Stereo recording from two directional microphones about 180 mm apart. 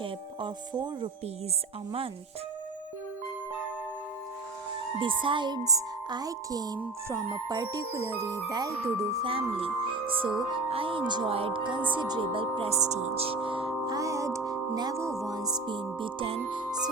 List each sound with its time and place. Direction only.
0.0 s music: 25° right (ahead or behind)
4.9 s music: 25° right (ahead or behind)
11.9 s speech: 25° right (ahead or behind)
15.3 s music: 20° right (ahead or behind)